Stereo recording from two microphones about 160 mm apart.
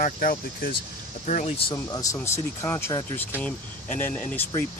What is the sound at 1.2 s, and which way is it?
Speech, 45° left (ahead or behind).